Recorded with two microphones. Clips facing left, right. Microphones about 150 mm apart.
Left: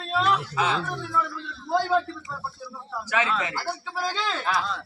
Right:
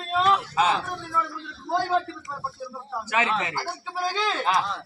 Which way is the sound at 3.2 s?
25° right (ahead or behind).